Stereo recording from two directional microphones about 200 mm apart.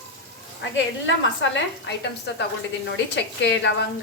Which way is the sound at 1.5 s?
60° left (ahead or behind).